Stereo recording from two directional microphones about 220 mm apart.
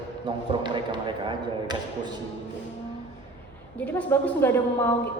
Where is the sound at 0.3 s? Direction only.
20° right (ahead or behind).